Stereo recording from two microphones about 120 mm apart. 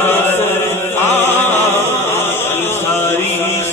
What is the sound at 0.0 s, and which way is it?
Chant, 20° left (ahead or behind).